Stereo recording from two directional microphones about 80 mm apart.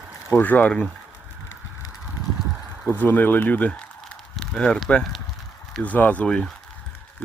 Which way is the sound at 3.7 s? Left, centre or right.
Centre.